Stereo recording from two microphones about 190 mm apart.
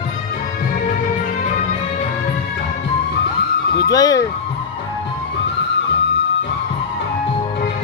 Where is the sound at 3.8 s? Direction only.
20° left (ahead or behind).